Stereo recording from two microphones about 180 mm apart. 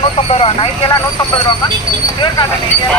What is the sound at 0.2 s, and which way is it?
Speech, 30° left (ahead or behind).